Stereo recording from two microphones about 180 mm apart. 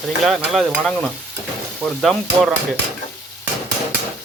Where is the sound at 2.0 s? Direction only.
Centre (ahead or behind).